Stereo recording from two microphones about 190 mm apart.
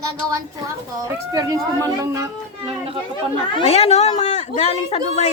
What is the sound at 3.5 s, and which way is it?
Speech, 35° left (ahead or behind).